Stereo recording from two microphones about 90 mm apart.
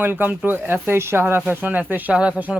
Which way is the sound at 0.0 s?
20° right (ahead or behind).